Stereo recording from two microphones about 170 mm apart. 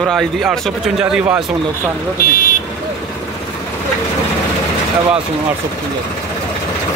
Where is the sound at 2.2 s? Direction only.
55° left (ahead or behind).